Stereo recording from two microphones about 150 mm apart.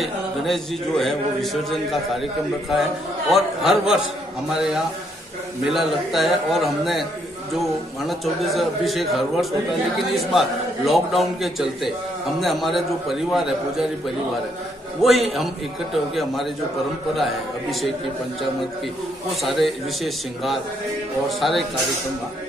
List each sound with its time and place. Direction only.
0.0 s a man's voice: centre (ahead or behind)
5.7 s a man's voice: centre (ahead or behind)
8.1 s a man's voice: centre (ahead or behind)
15.0 s a man's voice: centre (ahead or behind)
17.1 s a man's voice: centre (ahead or behind)
19.4 s a man's voice: centre (ahead or behind)